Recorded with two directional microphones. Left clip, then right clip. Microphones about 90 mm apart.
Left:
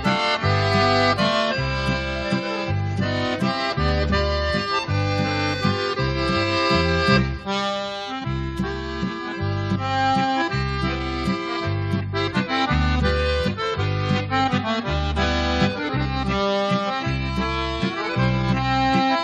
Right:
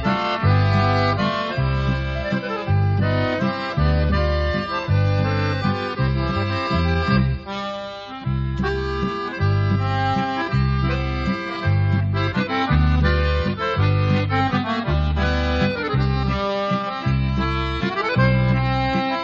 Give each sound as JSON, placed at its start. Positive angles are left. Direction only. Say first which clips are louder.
{"t": 0.0, "sound": "music", "louder": "left 1 dB", "side_deg": -35}
{"t": 3.3, "sound": "accordion", "louder": "even", "side_deg": -35}
{"t": 6.3, "sound": "music", "louder": "left 5 dB", "side_deg": -35}
{"t": 9.7, "sound": "accordion", "louder": "left 3 dB", "side_deg": -35}
{"t": 12.4, "sound": "accordion", "louder": "right 1 dB", "side_deg": -35}
{"t": 14.1, "sound": "music", "louder": "left 1 dB", "side_deg": -35}
{"t": 16.3, "sound": "music", "louder": "left 1 dB", "side_deg": -35}
{"t": 18.1, "sound": "accordion", "louder": "right 3 dB", "side_deg": -35}